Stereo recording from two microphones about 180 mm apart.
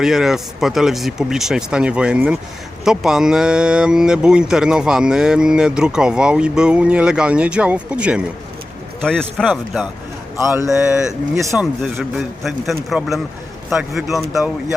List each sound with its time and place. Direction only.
0.0 s speech: centre (ahead or behind)
10.3 s speech: 15° right (ahead or behind)
10.7 s speech: 5° right (ahead or behind)